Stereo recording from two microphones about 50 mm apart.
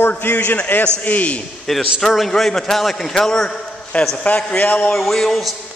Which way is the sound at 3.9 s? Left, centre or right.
Left.